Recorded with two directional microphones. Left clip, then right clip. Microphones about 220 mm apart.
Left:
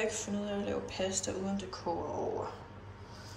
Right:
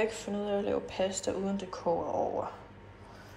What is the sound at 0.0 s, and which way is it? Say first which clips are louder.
Speech: right 3 dB; centre (ahead or behind).